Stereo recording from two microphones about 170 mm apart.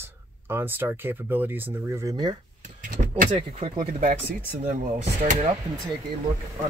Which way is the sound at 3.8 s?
45° right (ahead or behind).